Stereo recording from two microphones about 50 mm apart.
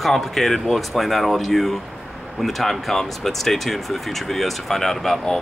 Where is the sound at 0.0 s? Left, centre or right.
Centre.